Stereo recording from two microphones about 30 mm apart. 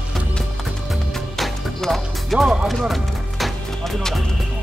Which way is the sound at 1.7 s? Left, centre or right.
Centre.